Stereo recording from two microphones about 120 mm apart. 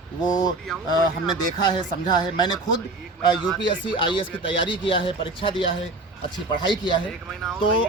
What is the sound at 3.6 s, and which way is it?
Speech, 40° left (ahead or behind).